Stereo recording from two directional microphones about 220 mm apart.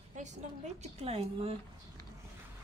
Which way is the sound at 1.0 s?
25° right (ahead or behind).